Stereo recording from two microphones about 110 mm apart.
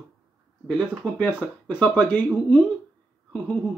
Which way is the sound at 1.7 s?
10° left (ahead or behind).